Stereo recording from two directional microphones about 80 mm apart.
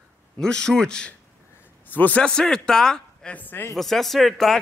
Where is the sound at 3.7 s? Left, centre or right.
Centre.